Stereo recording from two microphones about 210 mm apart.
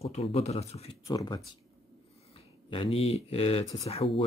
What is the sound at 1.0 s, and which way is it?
Speech, 15° left (ahead or behind).